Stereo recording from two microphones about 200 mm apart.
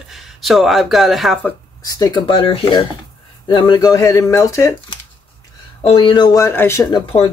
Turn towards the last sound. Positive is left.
turn(degrees=15)  # may be behind; listen again after turning